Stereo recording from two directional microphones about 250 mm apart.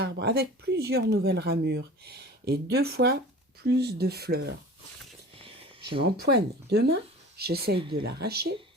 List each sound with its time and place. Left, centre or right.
0.0 s speech: right
6.0 s speech: right